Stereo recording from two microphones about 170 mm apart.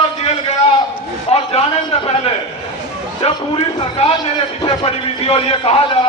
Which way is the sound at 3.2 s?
30° left (ahead or behind).